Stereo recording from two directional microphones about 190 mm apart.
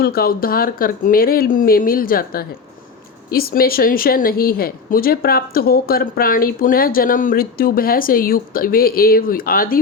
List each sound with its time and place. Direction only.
0.0 s speech: 55° left (ahead or behind)